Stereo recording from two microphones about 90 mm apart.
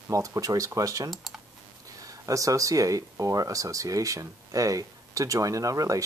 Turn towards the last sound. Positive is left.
turn(degrees=-40)  # may be behind; listen again after turning